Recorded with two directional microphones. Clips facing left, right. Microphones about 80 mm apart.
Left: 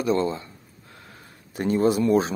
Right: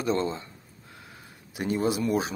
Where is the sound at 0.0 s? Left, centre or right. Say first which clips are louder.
Left 4 dB; right.